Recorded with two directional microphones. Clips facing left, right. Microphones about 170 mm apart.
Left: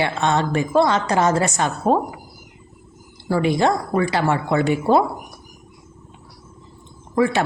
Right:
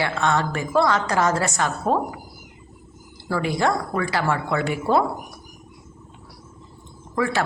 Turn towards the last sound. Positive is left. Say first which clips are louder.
# left 4 dB
turn(degrees=20)  # may be behind; listen again after turning